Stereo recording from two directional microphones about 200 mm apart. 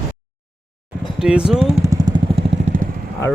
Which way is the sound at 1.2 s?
5° right (ahead or behind).